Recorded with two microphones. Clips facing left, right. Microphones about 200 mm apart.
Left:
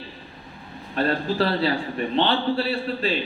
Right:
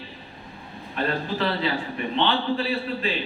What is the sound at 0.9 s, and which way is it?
A man's voice, 35° left (ahead or behind).